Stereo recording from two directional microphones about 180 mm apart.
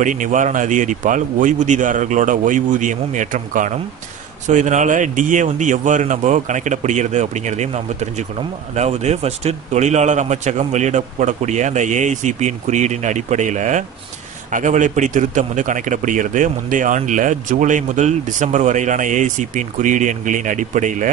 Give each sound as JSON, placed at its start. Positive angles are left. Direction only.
{"t": 0.0, "sound": "a man's voice", "side_deg": -45}